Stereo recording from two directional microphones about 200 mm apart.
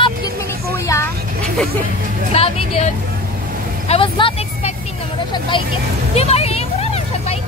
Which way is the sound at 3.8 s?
25° left (ahead or behind).